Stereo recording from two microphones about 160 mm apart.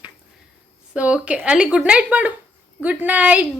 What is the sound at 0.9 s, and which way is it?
A woman's voice, 5° right (ahead or behind).